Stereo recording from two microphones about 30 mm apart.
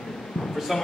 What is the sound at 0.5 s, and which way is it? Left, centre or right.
Speech, centre.